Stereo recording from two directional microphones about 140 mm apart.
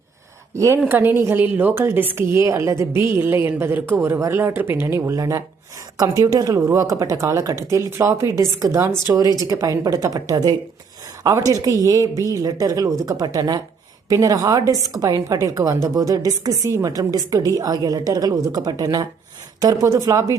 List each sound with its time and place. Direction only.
0.5 s a woman's voice: 20° right (ahead or behind)